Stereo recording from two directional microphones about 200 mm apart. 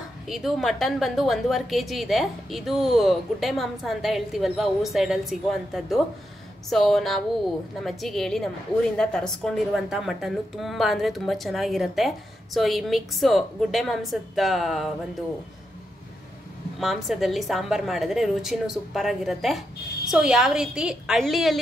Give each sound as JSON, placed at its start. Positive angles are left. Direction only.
{"t": 0.3, "sound": "a woman's voice", "side_deg": 0}
{"t": 16.8, "sound": "a woman's voice", "side_deg": 0}